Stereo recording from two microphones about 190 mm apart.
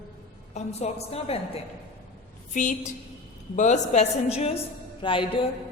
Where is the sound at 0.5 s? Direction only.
35° left (ahead or behind).